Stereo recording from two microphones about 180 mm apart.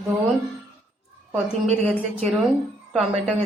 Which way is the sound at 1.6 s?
40° right (ahead or behind).